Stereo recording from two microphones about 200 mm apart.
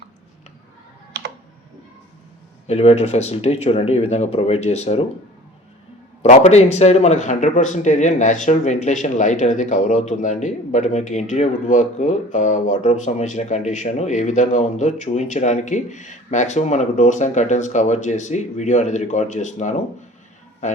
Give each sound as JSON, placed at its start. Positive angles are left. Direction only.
{"t": 2.6, "sound": "speech", "side_deg": 30}
{"t": 6.2, "sound": "speech", "side_deg": 35}